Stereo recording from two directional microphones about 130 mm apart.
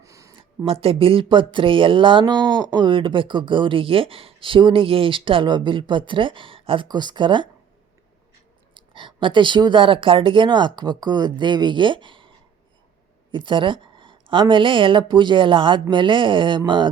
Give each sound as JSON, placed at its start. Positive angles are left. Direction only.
{"t": 0.0, "sound": "a sound", "side_deg": -25}
{"t": 0.6, "sound": "speech", "side_deg": -45}
{"t": 8.7, "sound": "speech", "side_deg": -40}
{"t": 13.3, "sound": "speech", "side_deg": -40}